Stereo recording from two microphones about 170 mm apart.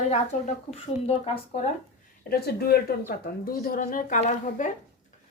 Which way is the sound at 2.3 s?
65° left (ahead or behind).